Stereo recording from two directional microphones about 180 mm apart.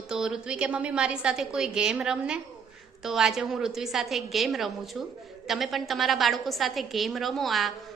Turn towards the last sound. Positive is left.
turn(degrees=0)  # may be behind; listen again after turning